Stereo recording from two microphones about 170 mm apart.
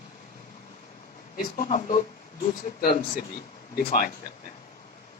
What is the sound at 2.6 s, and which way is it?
Speech, 50° left (ahead or behind).